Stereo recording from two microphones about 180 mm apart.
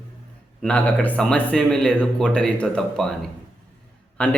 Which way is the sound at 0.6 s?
5° left (ahead or behind).